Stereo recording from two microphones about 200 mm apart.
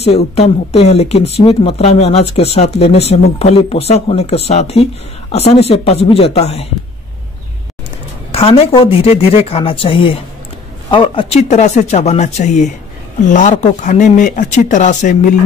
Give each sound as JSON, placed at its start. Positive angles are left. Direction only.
{"t": 0.0, "sound": "speech", "side_deg": 30}
{"t": 8.3, "sound": "speech", "side_deg": 30}